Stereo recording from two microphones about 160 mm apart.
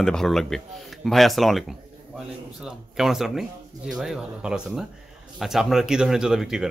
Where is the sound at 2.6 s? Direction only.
5° right (ahead or behind).